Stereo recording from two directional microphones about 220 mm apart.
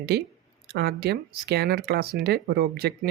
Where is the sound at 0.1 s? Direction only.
45° right (ahead or behind).